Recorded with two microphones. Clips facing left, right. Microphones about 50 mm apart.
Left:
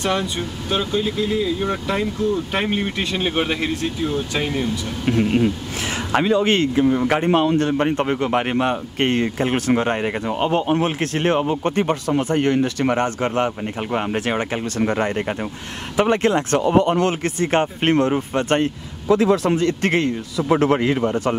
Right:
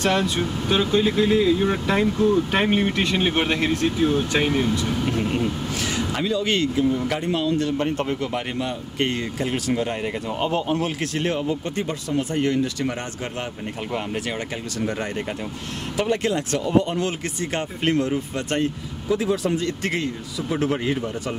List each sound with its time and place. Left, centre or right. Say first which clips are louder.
0.0 s speech: right 1 dB; centre
0.4 s speech: right 2 dB; centre
1.0 s a sound: right 3 dB; right
2.0 s speech: right 5 dB; centre
5.2 s speech: left 5 dB; left
5.9 s speech: left 8 dB; left
19.0 s a man's voice: left 6 dB; left